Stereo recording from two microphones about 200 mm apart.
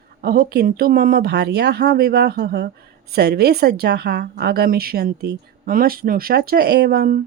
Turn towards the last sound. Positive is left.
turn(degrees=-50)  # may be behind; listen again after turning